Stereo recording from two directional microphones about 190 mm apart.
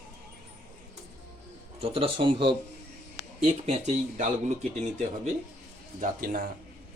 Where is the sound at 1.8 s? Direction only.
30° right (ahead or behind).